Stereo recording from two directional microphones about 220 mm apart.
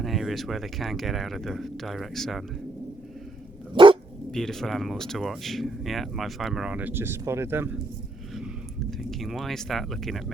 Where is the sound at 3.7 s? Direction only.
20° right (ahead or behind).